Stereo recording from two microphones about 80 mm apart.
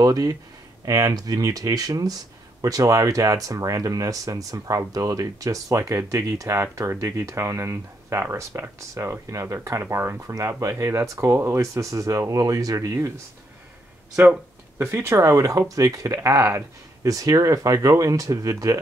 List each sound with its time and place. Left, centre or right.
0.0 s speech: right
14.8 s speech: right